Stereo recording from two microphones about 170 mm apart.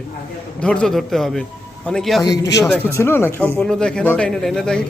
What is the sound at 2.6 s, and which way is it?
A man's voice, 10° left (ahead or behind).